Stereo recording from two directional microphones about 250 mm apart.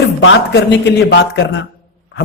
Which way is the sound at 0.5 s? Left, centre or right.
Left.